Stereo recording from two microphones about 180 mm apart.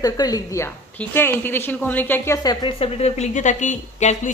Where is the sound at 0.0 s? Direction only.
20° left (ahead or behind).